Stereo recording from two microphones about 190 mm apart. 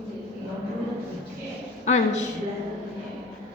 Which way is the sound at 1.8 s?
40° left (ahead or behind).